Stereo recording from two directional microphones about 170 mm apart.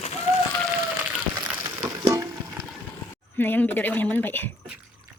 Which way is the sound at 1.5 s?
15° right (ahead or behind).